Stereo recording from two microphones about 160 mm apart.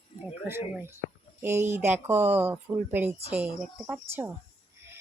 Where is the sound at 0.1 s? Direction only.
45° left (ahead or behind).